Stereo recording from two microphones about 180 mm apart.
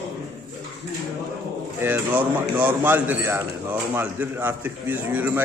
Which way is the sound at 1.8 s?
10° right (ahead or behind).